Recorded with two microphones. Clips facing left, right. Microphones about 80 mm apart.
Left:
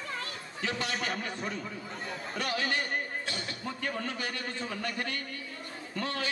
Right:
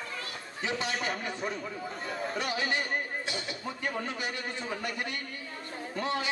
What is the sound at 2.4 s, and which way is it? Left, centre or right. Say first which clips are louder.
A man's voice: left 2 dB; centre.